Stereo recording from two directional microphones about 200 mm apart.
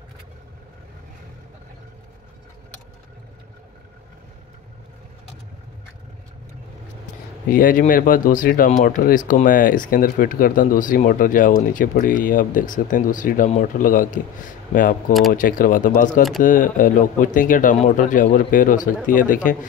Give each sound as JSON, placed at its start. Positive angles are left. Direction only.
{"t": 7.4, "sound": "speech", "side_deg": 45}